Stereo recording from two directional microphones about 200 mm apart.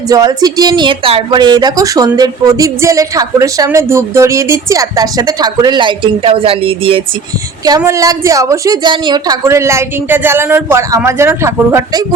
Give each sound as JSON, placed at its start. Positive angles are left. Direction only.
{"t": 0.1, "sound": "speech", "side_deg": -20}
{"t": 7.8, "sound": "a woman's voice", "side_deg": -15}